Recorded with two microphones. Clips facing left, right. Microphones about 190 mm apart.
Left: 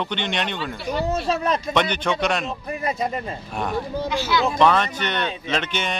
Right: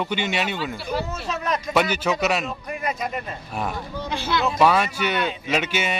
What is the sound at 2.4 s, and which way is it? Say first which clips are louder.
Speech: left 2 dB; 25° left (ahead or behind).